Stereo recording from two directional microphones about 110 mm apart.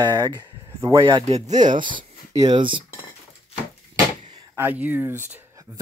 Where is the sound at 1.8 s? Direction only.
45° right (ahead or behind).